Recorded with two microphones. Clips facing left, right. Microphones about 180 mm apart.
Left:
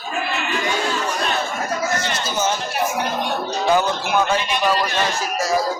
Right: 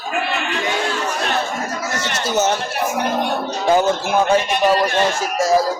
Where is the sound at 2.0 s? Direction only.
70° right (ahead or behind).